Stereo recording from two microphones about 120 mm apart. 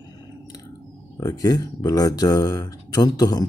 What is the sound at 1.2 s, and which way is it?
Speech, 30° left (ahead or behind).